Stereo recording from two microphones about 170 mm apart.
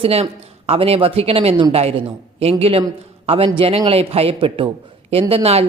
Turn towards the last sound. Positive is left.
turn(degrees=-35)  # may be behind; listen again after turning